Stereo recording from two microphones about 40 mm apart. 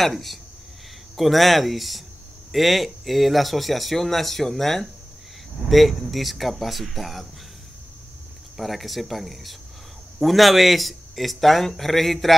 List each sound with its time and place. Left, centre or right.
0.0 s speech: centre
8.5 s speech: centre